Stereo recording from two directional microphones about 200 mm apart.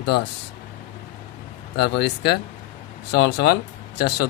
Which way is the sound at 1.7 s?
55° left (ahead or behind).